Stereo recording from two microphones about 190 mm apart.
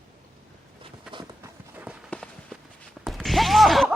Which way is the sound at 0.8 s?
25° right (ahead or behind).